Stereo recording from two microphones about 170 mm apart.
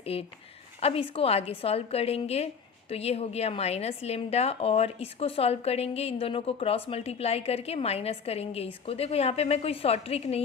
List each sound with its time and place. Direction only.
0.0 s a woman's voice: 35° left (ahead or behind)